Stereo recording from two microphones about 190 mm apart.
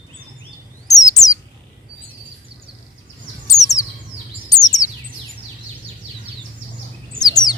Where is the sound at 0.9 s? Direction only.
20° left (ahead or behind).